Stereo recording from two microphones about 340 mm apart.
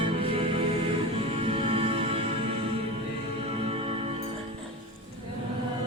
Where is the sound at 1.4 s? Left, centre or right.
Centre.